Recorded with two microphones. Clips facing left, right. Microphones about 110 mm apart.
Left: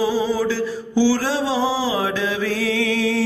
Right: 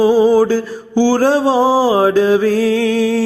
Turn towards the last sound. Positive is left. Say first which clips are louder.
# right 6 dB
turn(degrees=-40)  # may be behind; listen again after turning